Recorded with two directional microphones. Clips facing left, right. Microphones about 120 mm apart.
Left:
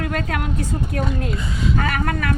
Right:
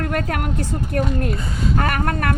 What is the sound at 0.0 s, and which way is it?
A woman's voice, 50° right (ahead or behind).